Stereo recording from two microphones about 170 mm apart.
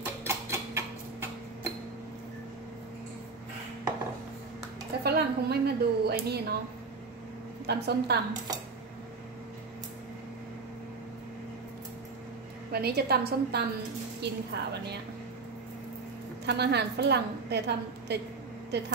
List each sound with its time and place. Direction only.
0.0 s tick-tock: 15° right (ahead or behind)
5.0 s a woman's voice: 70° right (ahead or behind)
7.6 s a woman's voice: 75° right (ahead or behind)
12.7 s a woman's voice: 70° right (ahead or behind)
16.4 s a woman's voice: 75° right (ahead or behind)